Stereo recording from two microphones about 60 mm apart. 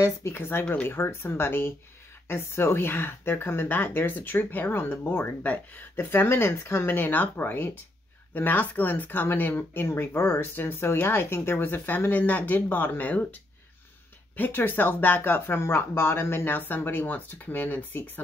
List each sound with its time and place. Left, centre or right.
0.3 s speech: left
5.4 s speech: left
5.9 s speech: left